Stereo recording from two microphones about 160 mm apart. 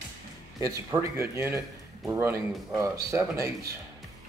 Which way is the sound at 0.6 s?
20° right (ahead or behind).